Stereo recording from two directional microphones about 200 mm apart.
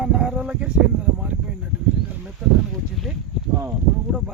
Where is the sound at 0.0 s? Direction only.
5° right (ahead or behind).